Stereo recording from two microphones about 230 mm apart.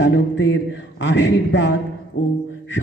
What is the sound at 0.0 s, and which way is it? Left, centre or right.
A man's voice, left.